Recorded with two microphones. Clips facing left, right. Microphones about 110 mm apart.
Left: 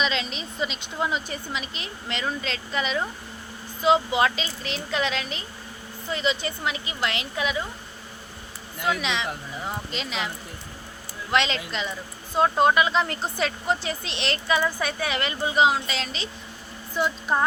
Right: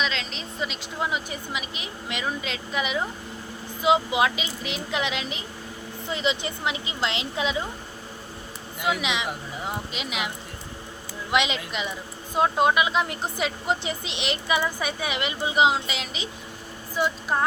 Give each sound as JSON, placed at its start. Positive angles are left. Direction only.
{"t": 0.0, "sound": "a woman's voice", "side_deg": 5}
{"t": 8.8, "sound": "speech", "side_deg": -15}
{"t": 17.0, "sound": "speech", "side_deg": 0}